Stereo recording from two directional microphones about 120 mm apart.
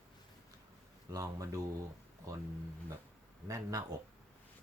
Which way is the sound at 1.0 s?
30° right (ahead or behind).